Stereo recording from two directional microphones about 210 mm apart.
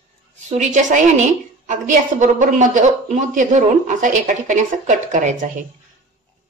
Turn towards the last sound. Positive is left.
turn(degrees=-35)  # may be behind; listen again after turning